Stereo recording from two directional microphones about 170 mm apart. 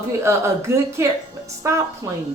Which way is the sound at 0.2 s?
15° right (ahead or behind).